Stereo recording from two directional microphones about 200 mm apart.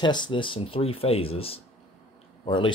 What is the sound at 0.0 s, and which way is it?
Speech, 20° left (ahead or behind).